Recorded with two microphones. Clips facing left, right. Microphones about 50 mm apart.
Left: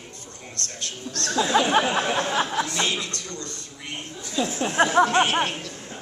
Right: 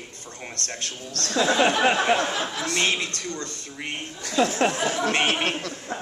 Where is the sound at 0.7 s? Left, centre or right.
Right.